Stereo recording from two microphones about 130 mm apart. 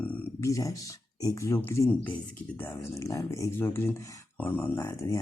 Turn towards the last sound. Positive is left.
turn(degrees=25)  # may be behind; listen again after turning